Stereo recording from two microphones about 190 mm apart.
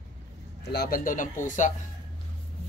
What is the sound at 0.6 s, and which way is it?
Speech, 55° left (ahead or behind).